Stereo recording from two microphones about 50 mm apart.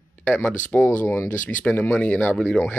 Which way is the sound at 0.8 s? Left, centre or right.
Left.